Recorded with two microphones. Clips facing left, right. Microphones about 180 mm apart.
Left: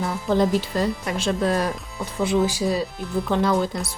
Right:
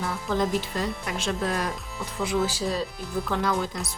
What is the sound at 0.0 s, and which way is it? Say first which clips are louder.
Speech: left 6 dB; 30° left (ahead or behind).